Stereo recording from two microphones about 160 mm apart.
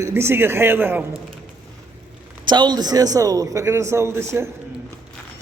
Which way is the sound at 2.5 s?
30° right (ahead or behind).